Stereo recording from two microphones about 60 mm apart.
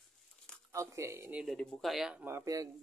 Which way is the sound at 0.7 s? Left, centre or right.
Right.